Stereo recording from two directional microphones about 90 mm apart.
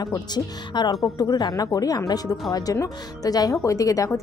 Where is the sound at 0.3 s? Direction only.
50° left (ahead or behind).